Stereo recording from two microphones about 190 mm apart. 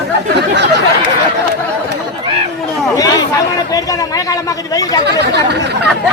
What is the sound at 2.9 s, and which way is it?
Speech, 20° left (ahead or behind).